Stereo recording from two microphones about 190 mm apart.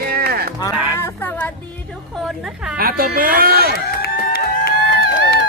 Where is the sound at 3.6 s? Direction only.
55° left (ahead or behind).